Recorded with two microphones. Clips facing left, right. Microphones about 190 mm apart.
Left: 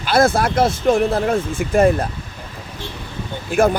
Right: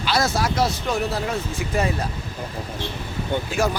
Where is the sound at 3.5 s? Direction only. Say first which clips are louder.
Left 10 dB; 55° left (ahead or behind).